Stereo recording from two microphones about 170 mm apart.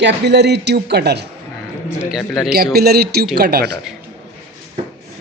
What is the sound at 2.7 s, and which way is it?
Speech, 70° right (ahead or behind).